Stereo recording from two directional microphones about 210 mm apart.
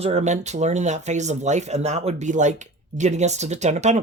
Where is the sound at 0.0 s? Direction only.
30° right (ahead or behind).